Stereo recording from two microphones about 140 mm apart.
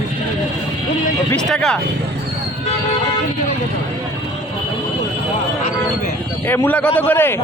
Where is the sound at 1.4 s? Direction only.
5° left (ahead or behind).